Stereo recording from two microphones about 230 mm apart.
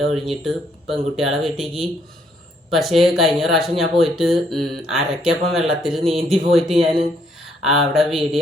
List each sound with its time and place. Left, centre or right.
0.3 s speech: centre
6.0 s speech: right
6.2 s speech: centre